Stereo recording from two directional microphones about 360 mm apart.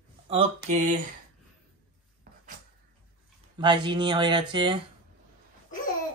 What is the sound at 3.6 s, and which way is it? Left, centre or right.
Speech, centre.